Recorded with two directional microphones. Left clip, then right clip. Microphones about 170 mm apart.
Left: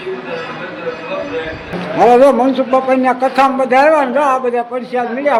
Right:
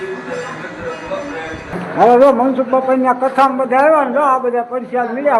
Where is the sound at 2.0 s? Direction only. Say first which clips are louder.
Left 1 dB; 10° left (ahead or behind).